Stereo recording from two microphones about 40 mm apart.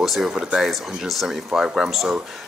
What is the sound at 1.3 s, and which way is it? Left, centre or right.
Speech, centre.